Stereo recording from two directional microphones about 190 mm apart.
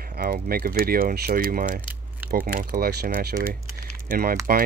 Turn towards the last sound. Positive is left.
turn(degrees=-50)  # may be behind; listen again after turning